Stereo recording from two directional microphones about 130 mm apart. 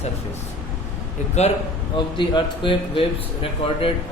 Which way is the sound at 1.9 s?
35° left (ahead or behind).